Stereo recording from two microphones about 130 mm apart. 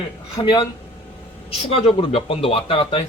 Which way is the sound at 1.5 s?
45° left (ahead or behind).